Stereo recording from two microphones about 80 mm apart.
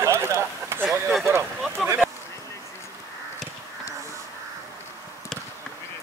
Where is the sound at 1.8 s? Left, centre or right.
Centre.